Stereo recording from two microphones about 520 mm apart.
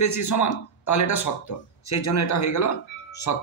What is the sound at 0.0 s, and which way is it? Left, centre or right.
A man's voice, left.